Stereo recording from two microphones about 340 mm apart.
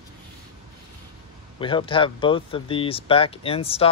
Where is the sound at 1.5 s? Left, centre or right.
Centre.